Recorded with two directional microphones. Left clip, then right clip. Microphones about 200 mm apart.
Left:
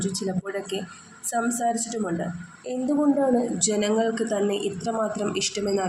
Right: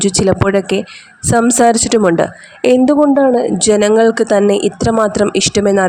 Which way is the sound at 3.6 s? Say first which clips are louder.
Right 14 dB; 50° right (ahead or behind).